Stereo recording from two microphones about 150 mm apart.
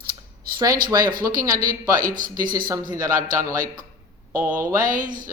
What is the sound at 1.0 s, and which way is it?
Speech, 70° right (ahead or behind).